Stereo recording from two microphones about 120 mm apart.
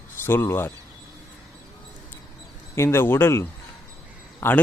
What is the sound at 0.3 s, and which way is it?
Speech, 20° left (ahead or behind).